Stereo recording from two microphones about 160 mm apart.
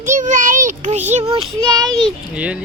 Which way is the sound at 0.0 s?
50° right (ahead or behind).